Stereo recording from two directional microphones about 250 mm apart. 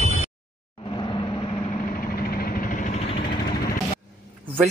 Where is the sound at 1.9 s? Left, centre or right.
Left.